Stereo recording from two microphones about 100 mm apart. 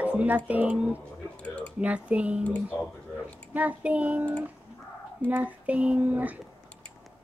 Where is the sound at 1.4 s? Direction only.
15° left (ahead or behind).